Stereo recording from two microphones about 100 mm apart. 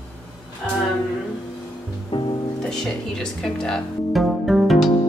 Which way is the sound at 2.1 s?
55° left (ahead or behind).